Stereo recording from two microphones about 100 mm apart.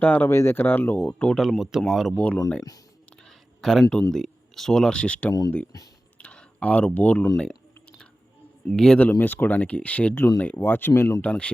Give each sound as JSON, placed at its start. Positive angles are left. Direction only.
{"t": 0.0, "sound": "speech", "side_deg": 20}
{"t": 1.2, "sound": "speech", "side_deg": 5}
{"t": 2.1, "sound": "speech", "side_deg": 10}
{"t": 3.2, "sound": "a sound", "side_deg": 5}
{"t": 4.1, "sound": "speech", "side_deg": 5}
{"t": 6.1, "sound": "a sound", "side_deg": 10}
{"t": 8.7, "sound": "speech", "side_deg": 5}
{"t": 9.0, "sound": "speech", "side_deg": 15}
{"t": 11.2, "sound": "speech", "side_deg": 10}